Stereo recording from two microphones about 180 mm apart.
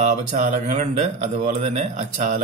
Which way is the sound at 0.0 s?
40° right (ahead or behind).